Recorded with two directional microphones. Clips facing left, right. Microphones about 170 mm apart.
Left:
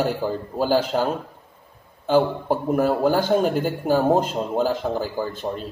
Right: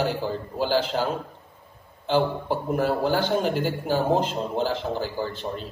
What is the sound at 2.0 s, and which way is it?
A man's voice, 45° left (ahead or behind).